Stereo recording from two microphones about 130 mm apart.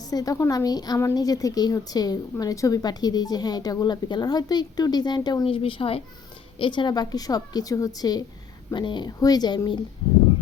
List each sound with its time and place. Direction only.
0.0 s a woman's voice: 30° left (ahead or behind)
5.5 s a woman's voice: 45° left (ahead or behind)